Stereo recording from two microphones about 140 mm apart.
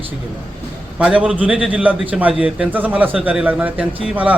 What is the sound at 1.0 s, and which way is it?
A man's voice, 10° right (ahead or behind).